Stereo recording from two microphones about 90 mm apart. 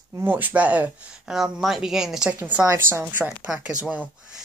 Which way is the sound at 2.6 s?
30° right (ahead or behind).